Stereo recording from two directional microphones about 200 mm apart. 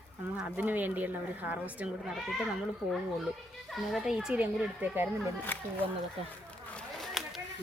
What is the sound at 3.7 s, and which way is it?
Speech, centre (ahead or behind).